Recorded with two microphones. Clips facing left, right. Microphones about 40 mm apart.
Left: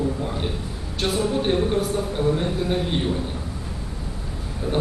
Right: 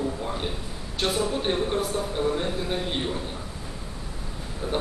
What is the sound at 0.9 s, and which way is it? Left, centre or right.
Speech, centre.